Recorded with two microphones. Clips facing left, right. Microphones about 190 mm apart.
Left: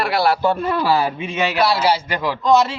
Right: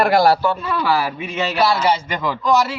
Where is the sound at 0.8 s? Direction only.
25° left (ahead or behind).